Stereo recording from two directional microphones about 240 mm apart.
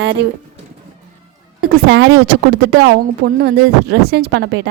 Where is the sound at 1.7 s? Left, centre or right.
Right.